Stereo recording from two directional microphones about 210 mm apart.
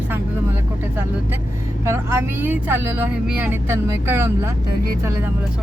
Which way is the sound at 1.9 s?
10° right (ahead or behind).